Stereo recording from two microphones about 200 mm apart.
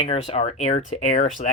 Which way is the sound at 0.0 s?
30° left (ahead or behind).